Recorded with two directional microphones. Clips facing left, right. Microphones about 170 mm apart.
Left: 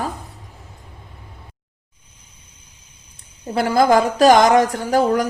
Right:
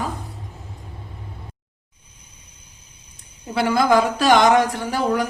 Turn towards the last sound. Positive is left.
turn(degrees=45)  # may be behind; listen again after turning